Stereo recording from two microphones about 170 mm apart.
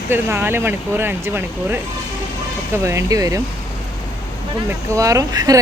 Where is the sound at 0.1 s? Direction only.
15° right (ahead or behind).